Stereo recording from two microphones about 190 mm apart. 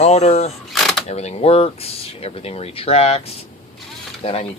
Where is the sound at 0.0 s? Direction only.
35° left (ahead or behind).